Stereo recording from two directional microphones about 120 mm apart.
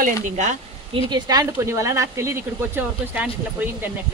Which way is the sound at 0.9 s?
35° right (ahead or behind).